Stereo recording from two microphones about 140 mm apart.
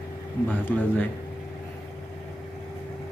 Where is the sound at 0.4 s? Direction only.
10° left (ahead or behind).